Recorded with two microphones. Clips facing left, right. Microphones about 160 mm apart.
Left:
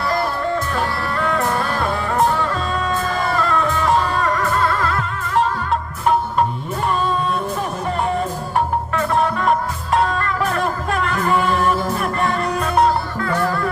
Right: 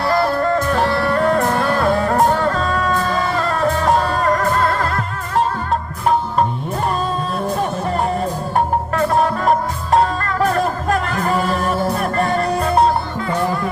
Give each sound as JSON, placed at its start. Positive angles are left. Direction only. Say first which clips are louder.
{"t": 0.8, "sound": "music", "louder": "right 5 dB", "side_deg": -40}
{"t": 8.5, "sound": "music", "louder": "right 2 dB", "side_deg": -40}
{"t": 13.2, "sound": "music", "louder": "even", "side_deg": -20}